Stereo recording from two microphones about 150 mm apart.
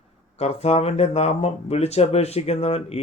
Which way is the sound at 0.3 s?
45° left (ahead or behind).